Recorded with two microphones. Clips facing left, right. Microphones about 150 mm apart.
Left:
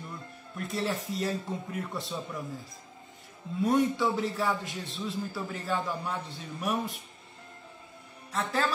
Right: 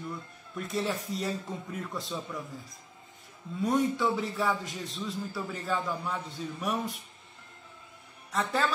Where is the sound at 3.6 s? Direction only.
Centre (ahead or behind).